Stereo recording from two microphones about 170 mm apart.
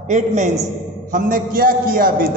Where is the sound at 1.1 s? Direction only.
55° right (ahead or behind).